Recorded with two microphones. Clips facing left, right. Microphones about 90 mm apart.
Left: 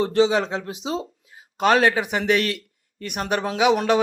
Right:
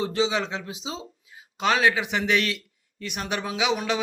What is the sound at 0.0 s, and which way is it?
A man's voice, 50° left (ahead or behind).